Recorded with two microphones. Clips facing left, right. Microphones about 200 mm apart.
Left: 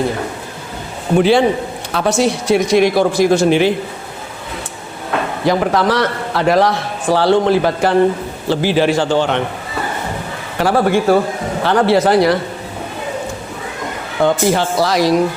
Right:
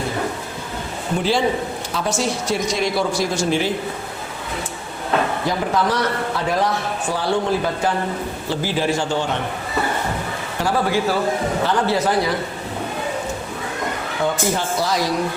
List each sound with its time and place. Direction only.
1.2 s a man's voice: 65° left (ahead or behind)
5.5 s a man's voice: 80° left
10.6 s speech: 60° left (ahead or behind)
11.6 s a man's voice: 75° left (ahead or behind)
14.2 s speech: 90° left
14.5 s a man's voice: 80° left